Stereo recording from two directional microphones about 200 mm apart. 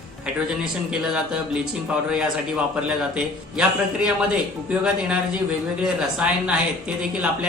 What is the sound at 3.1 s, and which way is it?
Speech, 5° right (ahead or behind).